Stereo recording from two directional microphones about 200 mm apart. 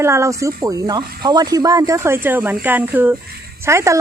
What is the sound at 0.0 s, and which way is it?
A woman's voice, 15° right (ahead or behind).